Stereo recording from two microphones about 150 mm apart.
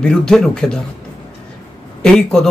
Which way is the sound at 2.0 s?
5° left (ahead or behind).